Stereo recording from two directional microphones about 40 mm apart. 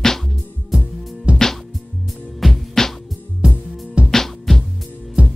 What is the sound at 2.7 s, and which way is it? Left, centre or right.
Music, centre.